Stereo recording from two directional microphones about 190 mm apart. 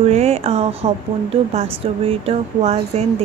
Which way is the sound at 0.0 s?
35° right (ahead or behind).